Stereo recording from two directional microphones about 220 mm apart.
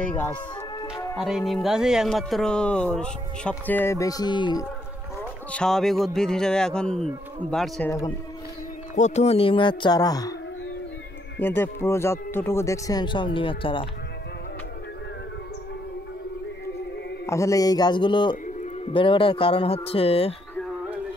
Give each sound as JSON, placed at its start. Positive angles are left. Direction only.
{"t": 0.0, "sound": "speech", "side_deg": 10}
{"t": 5.5, "sound": "speech", "side_deg": 5}
{"t": 8.9, "sound": "speech", "side_deg": 30}
{"t": 11.3, "sound": "speech", "side_deg": 10}
{"t": 17.3, "sound": "speech", "side_deg": 15}
{"t": 20.5, "sound": "music", "side_deg": 0}